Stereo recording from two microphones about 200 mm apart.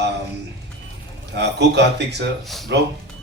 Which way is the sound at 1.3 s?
60° right (ahead or behind).